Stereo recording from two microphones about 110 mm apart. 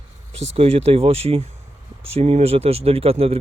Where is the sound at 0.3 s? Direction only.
70° right (ahead or behind).